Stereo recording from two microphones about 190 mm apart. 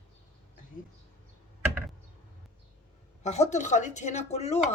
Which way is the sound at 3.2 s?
35° left (ahead or behind).